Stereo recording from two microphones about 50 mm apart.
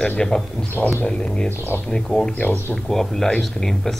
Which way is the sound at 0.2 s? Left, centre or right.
Centre.